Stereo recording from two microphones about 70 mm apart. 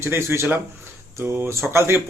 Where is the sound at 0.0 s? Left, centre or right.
Right.